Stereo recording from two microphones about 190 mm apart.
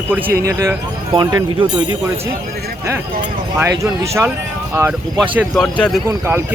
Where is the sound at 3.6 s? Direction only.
15° right (ahead or behind).